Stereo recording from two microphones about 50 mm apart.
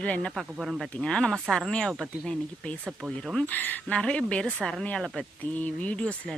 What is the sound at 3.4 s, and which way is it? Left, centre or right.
Speech, left.